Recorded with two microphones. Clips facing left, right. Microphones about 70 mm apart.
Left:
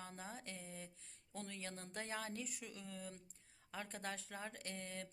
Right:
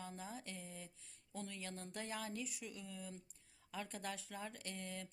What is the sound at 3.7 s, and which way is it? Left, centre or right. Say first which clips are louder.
Speech: right 1 dB; left.